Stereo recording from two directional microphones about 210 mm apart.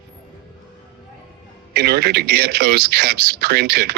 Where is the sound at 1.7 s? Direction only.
50° right (ahead or behind).